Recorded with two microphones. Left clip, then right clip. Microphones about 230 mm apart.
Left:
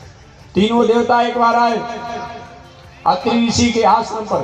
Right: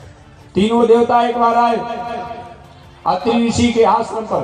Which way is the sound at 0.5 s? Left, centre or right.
Left.